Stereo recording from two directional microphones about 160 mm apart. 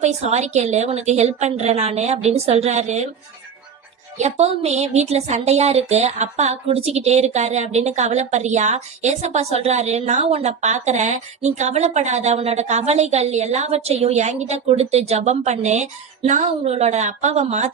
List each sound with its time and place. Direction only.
0.0 s speech: 45° right (ahead or behind)
4.2 s speech: 40° right (ahead or behind)